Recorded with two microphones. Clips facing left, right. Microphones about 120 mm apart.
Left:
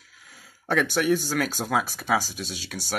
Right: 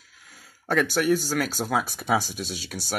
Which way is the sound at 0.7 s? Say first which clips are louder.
Even; 5° right (ahead or behind).